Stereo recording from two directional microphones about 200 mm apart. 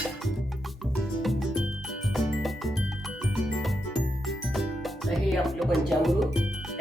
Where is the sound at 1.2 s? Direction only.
Centre (ahead or behind).